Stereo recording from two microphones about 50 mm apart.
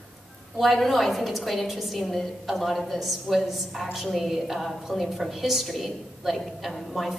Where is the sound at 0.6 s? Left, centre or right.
Centre.